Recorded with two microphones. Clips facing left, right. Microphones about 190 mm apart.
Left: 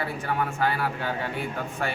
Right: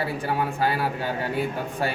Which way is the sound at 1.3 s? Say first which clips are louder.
Right 4 dB; 40° right (ahead or behind).